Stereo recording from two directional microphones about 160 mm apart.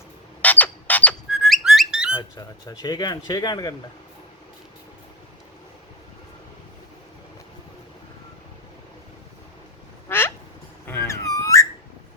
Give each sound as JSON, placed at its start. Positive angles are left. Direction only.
{"t": 0.4, "sound": "squawk", "side_deg": 10}
{"t": 1.3, "sound": "whistling", "side_deg": 0}
{"t": 2.1, "sound": "speech", "side_deg": 25}
{"t": 10.1, "sound": "quack", "side_deg": 15}
{"t": 10.8, "sound": "a sound", "side_deg": 15}